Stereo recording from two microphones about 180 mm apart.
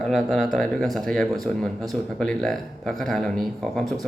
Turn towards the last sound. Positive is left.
turn(degrees=0)  # may be behind; listen again after turning